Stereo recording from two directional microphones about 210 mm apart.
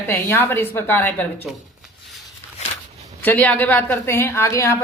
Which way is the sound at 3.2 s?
5° left (ahead or behind).